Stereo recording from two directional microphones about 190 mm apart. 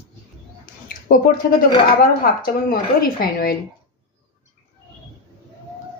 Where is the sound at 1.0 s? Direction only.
50° left (ahead or behind).